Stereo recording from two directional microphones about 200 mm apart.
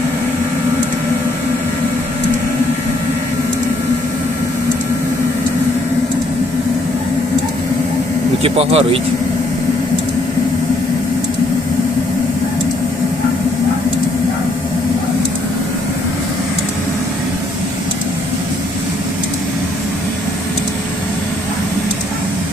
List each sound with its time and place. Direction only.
8.4 s speech: 30° right (ahead or behind)